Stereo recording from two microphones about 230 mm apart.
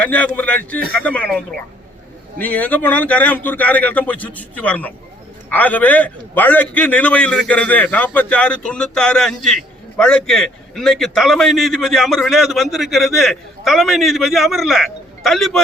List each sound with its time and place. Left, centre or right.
0.1 s a man's voice: centre
2.4 s a man's voice: centre